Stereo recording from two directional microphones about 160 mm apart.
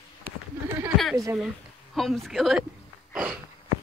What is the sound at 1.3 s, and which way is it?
Speech, centre (ahead or behind).